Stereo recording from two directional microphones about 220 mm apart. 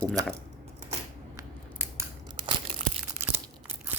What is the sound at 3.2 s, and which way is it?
Crumpling, 10° right (ahead or behind).